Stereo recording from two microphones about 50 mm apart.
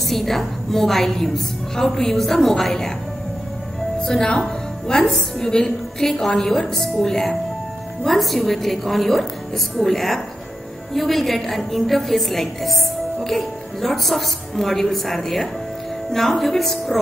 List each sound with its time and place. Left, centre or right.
0.0 s a woman's voice: centre
4.0 s a woman's voice: centre